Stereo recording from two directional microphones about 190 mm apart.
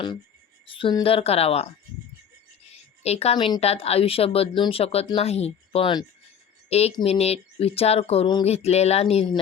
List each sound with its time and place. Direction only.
0.7 s speech: 25° left (ahead or behind)
3.0 s speech: 35° left (ahead or behind)